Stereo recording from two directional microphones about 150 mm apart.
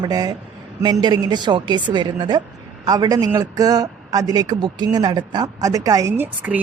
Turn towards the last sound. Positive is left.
turn(degrees=-10)  # may be behind; listen again after turning